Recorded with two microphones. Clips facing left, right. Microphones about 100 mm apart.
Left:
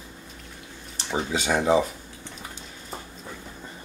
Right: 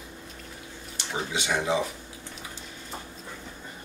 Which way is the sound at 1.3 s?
40° left (ahead or behind).